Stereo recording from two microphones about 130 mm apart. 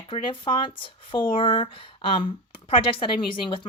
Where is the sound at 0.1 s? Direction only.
40° left (ahead or behind).